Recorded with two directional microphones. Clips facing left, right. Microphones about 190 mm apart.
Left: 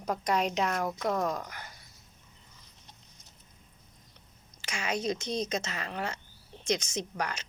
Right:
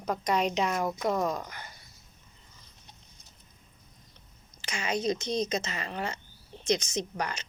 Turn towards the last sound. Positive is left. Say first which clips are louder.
# right 1 dB
turn(degrees=5)  # may be behind; listen again after turning